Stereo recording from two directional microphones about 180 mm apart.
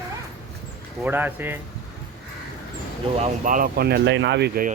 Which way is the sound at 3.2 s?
45° right (ahead or behind).